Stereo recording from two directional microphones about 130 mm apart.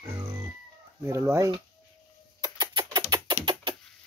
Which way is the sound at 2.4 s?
35° right (ahead or behind).